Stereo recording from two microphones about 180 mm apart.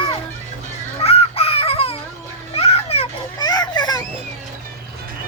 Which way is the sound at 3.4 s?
20° left (ahead or behind).